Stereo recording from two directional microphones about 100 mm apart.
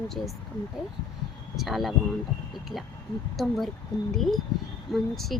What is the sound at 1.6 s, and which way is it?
Speech, centre (ahead or behind).